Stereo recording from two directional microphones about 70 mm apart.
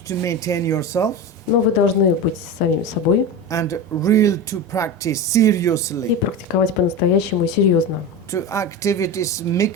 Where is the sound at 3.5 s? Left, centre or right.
Left.